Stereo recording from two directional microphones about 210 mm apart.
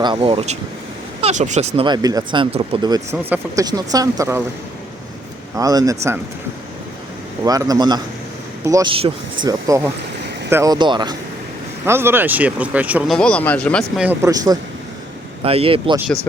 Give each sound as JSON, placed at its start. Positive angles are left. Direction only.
{"t": 0.0, "sound": "speech", "side_deg": -25}
{"t": 5.5, "sound": "speech", "side_deg": -15}
{"t": 7.4, "sound": "speech", "side_deg": -15}
{"t": 11.9, "sound": "speech", "side_deg": -10}
{"t": 13.1, "sound": "speech", "side_deg": 5}